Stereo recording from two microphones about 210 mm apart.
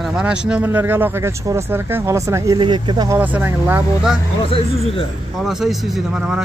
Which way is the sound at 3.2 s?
10° right (ahead or behind).